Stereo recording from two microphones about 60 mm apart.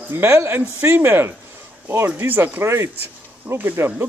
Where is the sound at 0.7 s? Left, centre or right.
Right.